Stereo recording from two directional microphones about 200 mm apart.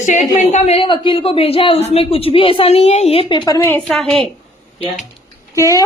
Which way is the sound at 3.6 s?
10° left (ahead or behind).